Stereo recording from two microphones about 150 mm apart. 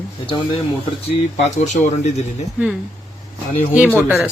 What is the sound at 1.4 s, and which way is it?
Speech, 50° left (ahead or behind).